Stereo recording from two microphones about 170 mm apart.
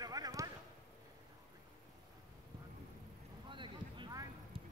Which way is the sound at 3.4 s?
30° right (ahead or behind).